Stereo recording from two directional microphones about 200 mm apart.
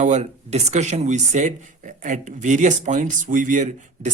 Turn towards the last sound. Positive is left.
turn(degrees=-40)  # may be behind; listen again after turning